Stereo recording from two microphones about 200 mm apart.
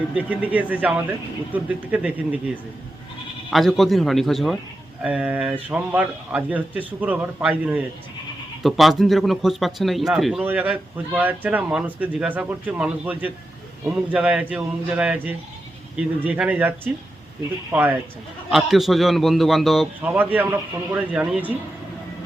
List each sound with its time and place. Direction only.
0.1 s a man's voice: 10° right (ahead or behind)
3.5 s a man's voice: centre (ahead or behind)